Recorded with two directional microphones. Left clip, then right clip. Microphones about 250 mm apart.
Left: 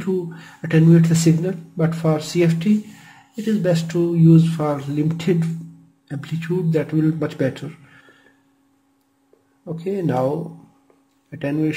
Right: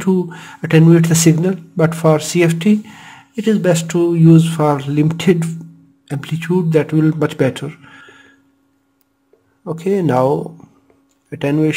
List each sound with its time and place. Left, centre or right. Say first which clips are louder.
0.0 s speech: right 6 dB; right
9.7 s speech: right 7 dB; right